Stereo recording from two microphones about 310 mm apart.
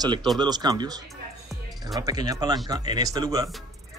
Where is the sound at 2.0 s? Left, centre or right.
Centre.